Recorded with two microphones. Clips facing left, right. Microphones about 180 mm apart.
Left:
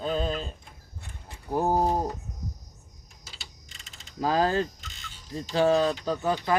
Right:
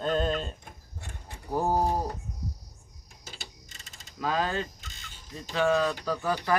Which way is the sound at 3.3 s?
45° right (ahead or behind).